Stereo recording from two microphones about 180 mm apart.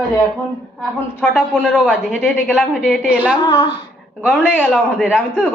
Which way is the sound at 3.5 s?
25° left (ahead or behind).